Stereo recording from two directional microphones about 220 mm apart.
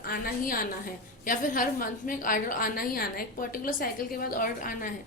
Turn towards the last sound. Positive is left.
turn(degrees=40)  # may be behind; listen again after turning